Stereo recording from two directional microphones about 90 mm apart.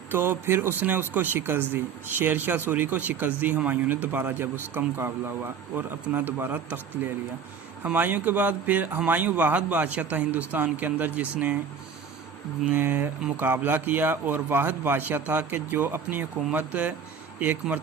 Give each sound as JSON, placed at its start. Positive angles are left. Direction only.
{"t": 0.1, "sound": "speech", "side_deg": -25}
{"t": 7.9, "sound": "speech", "side_deg": -20}
{"t": 12.7, "sound": "speech", "side_deg": -25}